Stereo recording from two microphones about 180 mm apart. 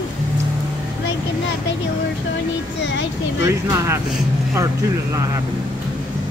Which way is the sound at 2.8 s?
80° left.